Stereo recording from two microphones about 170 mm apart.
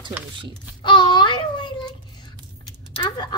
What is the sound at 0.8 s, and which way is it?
A child's voice, 25° left (ahead or behind).